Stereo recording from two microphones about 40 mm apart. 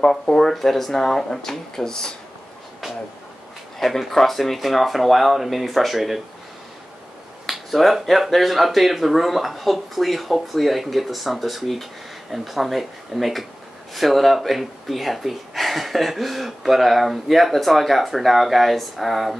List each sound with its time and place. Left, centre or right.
0.0 s speech: centre
3.8 s speech: centre
7.4 s speech: centre